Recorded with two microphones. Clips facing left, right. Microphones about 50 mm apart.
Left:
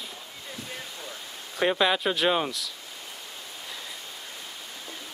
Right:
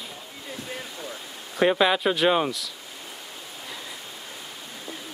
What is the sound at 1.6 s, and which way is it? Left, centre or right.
Speech, centre.